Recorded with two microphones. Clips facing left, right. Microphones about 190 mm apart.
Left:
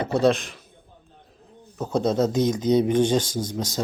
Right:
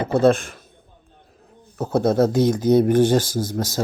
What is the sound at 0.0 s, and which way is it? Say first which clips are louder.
Speech: right 4 dB; 50° right (ahead or behind).